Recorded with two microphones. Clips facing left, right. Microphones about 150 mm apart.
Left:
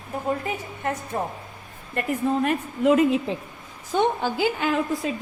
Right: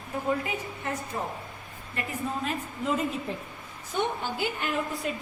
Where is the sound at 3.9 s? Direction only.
90° left.